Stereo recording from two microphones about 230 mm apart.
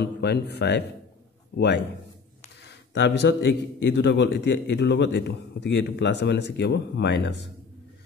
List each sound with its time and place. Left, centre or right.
0.0 s a man's voice: left
2.9 s a man's voice: left